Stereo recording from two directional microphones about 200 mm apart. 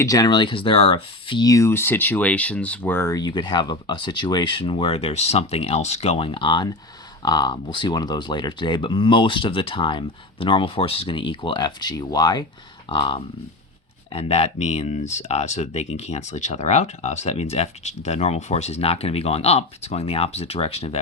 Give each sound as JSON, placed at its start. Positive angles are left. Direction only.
{"t": 0.0, "sound": "speech", "side_deg": 15}